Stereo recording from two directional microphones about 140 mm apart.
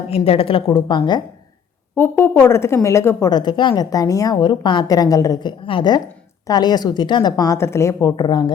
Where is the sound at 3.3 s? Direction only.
30° left (ahead or behind).